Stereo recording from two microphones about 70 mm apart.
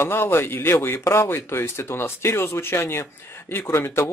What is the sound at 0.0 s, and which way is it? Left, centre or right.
Speech, left.